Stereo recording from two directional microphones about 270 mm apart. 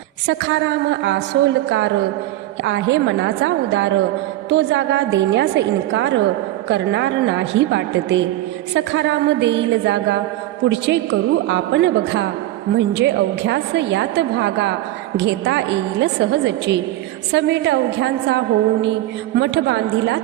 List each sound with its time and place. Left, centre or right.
0.3 s a woman's voice: right